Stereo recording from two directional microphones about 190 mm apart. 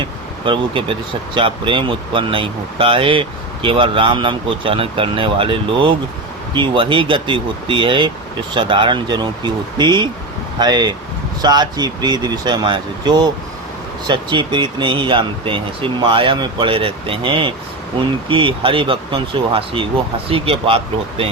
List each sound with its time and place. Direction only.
0.0 s speech: 25° right (ahead or behind)